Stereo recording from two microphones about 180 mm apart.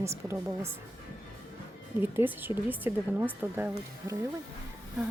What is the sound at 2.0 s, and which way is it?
Speech, 10° right (ahead or behind).